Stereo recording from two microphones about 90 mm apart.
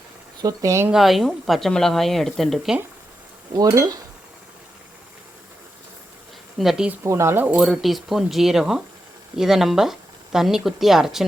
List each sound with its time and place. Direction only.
0.4 s speech: 35° right (ahead or behind)
0.9 s speech: 5° right (ahead or behind)
3.5 s cutlery: 45° right (ahead or behind)
6.6 s speech: centre (ahead or behind)
7.0 s speech: 30° right (ahead or behind)
7.6 s speech: centre (ahead or behind)